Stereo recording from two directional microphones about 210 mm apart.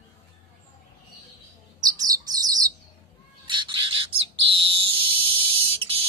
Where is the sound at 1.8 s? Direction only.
15° right (ahead or behind).